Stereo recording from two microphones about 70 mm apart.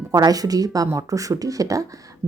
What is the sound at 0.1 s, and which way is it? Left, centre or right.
A woman's voice, right.